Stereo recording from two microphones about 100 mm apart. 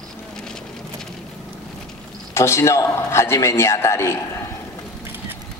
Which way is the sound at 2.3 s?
25° left (ahead or behind).